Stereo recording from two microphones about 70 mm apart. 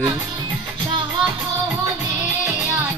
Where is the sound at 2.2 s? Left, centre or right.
Right.